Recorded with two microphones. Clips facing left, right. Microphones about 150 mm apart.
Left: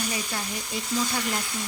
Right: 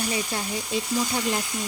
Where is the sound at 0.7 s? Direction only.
15° right (ahead or behind).